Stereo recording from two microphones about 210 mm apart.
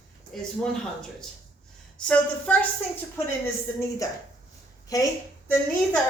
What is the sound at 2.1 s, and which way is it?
Speech, 5° left (ahead or behind).